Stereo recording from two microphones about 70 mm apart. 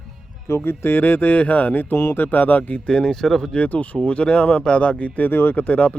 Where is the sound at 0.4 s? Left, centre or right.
Left.